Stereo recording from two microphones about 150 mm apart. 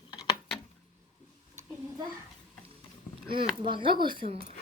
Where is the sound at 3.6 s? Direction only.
35° right (ahead or behind).